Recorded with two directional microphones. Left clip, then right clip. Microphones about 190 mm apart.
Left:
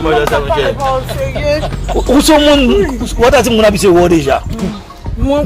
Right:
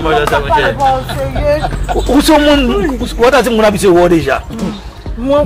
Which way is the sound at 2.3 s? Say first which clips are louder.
Left 1 dB; 15° right (ahead or behind).